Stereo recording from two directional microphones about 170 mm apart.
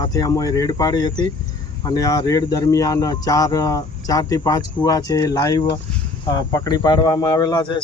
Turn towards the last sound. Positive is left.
turn(degrees=25)  # may be behind; listen again after turning